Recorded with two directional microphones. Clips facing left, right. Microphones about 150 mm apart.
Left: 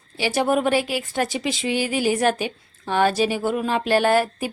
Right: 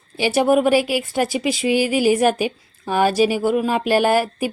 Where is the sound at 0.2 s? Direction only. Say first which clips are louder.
Right 4 dB; 10° right (ahead or behind).